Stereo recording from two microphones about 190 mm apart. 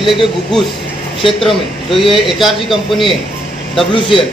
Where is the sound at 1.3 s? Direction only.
Centre (ahead or behind).